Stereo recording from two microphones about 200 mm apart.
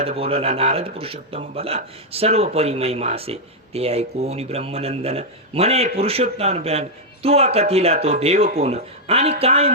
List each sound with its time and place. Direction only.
0.0 s speech: 30° right (ahead or behind)